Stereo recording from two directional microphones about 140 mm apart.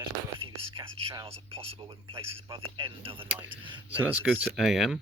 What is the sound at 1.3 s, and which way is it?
Speech, 45° right (ahead or behind).